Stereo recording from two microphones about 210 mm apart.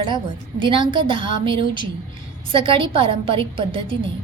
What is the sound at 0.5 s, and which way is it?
A woman's voice, 25° right (ahead or behind).